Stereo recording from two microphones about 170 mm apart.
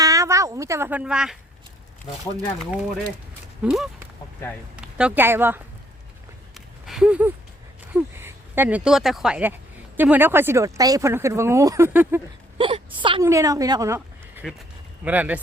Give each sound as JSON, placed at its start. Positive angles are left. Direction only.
{"t": 0.0, "sound": "a sound", "side_deg": -20}
{"t": 2.6, "sound": "speech", "side_deg": 0}
{"t": 6.8, "sound": "a sound", "side_deg": -5}
{"t": 7.9, "sound": "speech", "side_deg": -15}
{"t": 12.5, "sound": "whimper", "side_deg": -30}
{"t": 13.2, "sound": "speech", "side_deg": -20}